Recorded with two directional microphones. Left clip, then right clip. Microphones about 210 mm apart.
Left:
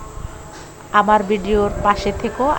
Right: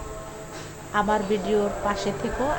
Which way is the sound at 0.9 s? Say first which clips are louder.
Left 9 dB; 20° left (ahead or behind).